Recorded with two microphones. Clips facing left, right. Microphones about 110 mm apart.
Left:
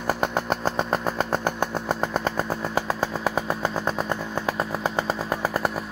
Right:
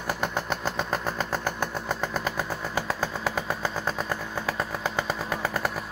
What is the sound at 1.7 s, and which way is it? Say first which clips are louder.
Vehicle: left 4 dB; 30° left (ahead or behind).